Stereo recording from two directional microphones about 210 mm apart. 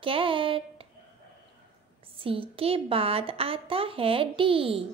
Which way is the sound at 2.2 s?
25° right (ahead or behind).